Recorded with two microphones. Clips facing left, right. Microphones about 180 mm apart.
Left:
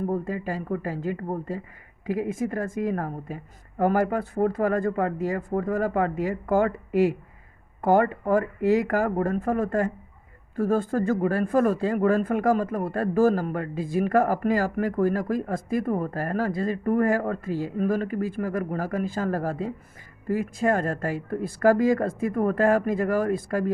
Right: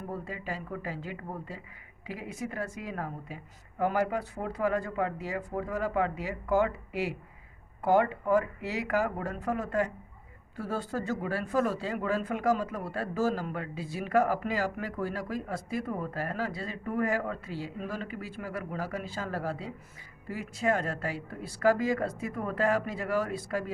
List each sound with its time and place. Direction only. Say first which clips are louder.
0.1 s speech: left 9 dB; 45° left (ahead or behind)